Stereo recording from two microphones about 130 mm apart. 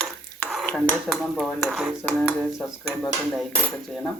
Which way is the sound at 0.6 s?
15° left (ahead or behind).